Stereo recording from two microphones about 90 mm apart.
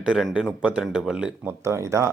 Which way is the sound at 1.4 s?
30° right (ahead or behind).